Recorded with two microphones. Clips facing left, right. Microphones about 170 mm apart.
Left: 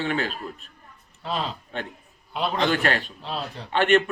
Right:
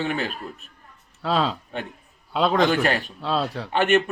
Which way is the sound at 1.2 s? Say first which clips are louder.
Right 6 dB; 90° right.